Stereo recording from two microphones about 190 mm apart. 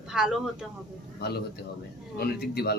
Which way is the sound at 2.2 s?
55° left (ahead or behind).